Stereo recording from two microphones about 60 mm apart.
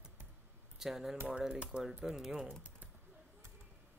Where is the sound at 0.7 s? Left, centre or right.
Centre.